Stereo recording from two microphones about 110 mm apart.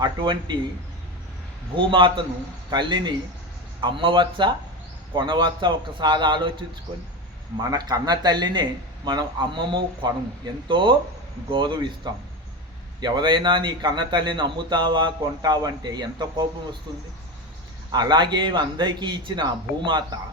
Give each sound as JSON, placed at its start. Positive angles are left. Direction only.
{"t": 0.0, "sound": "a man's voice", "side_deg": -45}
{"t": 1.7, "sound": "a man's voice", "side_deg": -50}
{"t": 7.5, "sound": "a man's voice", "side_deg": -35}
{"t": 13.0, "sound": "a man's voice", "side_deg": -40}
{"t": 17.9, "sound": "a man's voice", "side_deg": -40}